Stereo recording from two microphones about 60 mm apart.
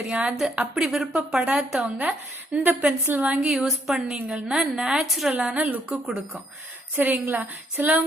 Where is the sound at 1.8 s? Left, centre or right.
Right.